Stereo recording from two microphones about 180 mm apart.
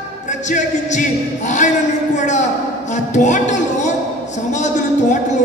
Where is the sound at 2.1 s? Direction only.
40° left (ahead or behind).